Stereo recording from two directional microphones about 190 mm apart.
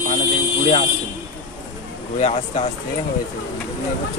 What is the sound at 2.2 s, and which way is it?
Speech, 35° left (ahead or behind).